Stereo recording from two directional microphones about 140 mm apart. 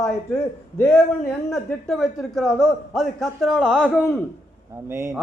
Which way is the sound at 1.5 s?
Centre (ahead or behind).